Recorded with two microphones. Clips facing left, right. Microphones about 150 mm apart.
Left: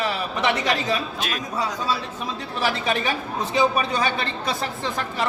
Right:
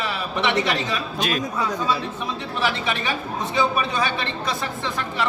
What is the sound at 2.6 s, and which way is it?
A man's voice, 40° left (ahead or behind).